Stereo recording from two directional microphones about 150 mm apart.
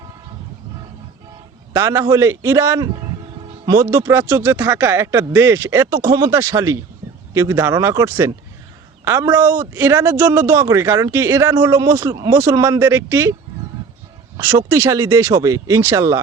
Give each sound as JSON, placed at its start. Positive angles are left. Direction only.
{"t": 1.7, "sound": "speech", "side_deg": -15}
{"t": 14.3, "sound": "speech", "side_deg": -15}